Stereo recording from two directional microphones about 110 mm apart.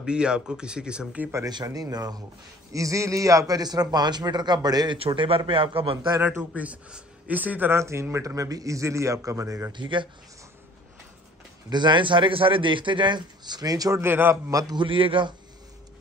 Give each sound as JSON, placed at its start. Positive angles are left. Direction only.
{"t": 0.0, "sound": "speech", "side_deg": -10}
{"t": 1.5, "sound": "a man's voice", "side_deg": -35}
{"t": 4.9, "sound": "a man's voice", "side_deg": -55}
{"t": 6.2, "sound": "speech", "side_deg": -15}
{"t": 9.7, "sound": "speech", "side_deg": -45}
{"t": 11.7, "sound": "speech", "side_deg": -45}
{"t": 14.0, "sound": "speech", "side_deg": -20}
{"t": 14.5, "sound": "a man's voice", "side_deg": -30}
{"t": 14.8, "sound": "speech", "side_deg": -50}